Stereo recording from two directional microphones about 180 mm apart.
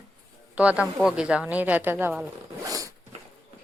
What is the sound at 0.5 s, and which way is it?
A woman's voice, 5° right (ahead or behind).